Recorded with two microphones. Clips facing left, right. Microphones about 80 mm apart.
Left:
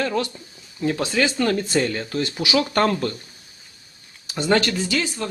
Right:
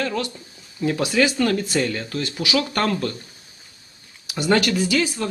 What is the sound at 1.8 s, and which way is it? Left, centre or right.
Speech, centre.